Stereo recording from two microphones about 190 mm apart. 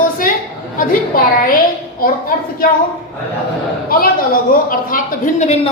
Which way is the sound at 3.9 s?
50° left (ahead or behind).